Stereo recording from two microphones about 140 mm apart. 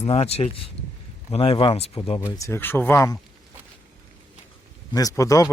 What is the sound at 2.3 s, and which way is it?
Speech, 20° left (ahead or behind).